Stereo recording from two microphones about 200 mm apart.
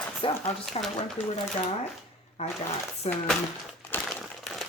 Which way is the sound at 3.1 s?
30° left (ahead or behind).